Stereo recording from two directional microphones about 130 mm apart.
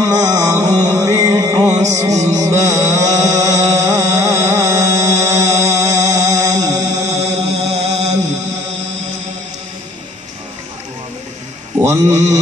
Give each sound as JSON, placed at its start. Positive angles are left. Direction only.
{"t": 0.0, "sound": "music", "side_deg": -25}
{"t": 5.2, "sound": "chant", "side_deg": -25}
{"t": 7.7, "sound": "chant", "side_deg": -55}
{"t": 11.8, "sound": "a sound", "side_deg": -20}